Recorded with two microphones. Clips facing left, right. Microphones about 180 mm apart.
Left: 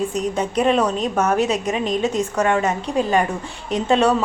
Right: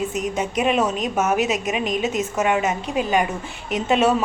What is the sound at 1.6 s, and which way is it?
A woman's voice, 15° right (ahead or behind).